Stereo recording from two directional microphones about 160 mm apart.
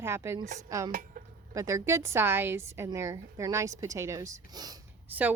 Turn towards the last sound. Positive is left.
turn(degrees=-10)  # may be behind; listen again after turning